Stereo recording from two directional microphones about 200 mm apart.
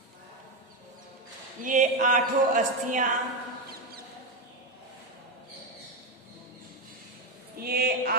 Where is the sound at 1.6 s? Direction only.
40° right (ahead or behind).